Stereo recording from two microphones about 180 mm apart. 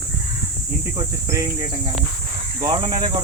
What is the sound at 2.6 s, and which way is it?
Speech, 30° right (ahead or behind).